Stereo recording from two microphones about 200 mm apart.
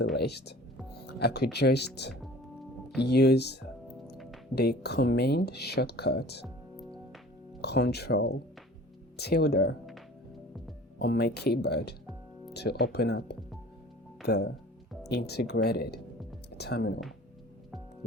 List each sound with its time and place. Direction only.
0.1 s speech: 55° left (ahead or behind)
7.6 s speech: 55° left (ahead or behind)
11.0 s speech: 50° left (ahead or behind)